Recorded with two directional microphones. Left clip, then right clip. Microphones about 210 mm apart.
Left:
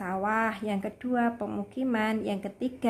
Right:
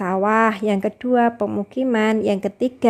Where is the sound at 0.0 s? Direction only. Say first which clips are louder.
Right 11 dB; 40° right (ahead or behind).